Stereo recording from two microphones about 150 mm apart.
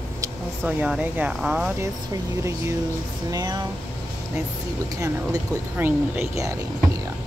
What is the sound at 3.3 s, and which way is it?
Speech, 25° right (ahead or behind).